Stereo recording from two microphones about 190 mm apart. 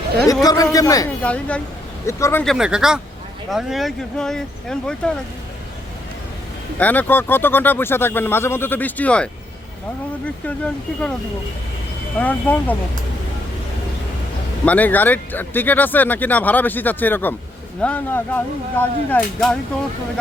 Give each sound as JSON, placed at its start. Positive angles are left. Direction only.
{"t": 0.4, "sound": "speech", "side_deg": 20}
{"t": 1.2, "sound": "speech", "side_deg": 5}
{"t": 2.4, "sound": "speech", "side_deg": 0}
{"t": 6.7, "sound": "speech", "side_deg": 10}
{"t": 12.2, "sound": "speech", "side_deg": 10}
{"t": 14.6, "sound": "speech", "side_deg": 10}